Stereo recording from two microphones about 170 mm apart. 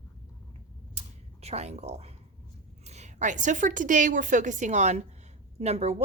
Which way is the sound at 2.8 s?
40° right (ahead or behind).